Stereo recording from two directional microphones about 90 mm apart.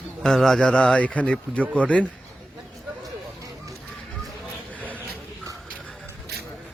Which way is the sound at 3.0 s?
40° right (ahead or behind).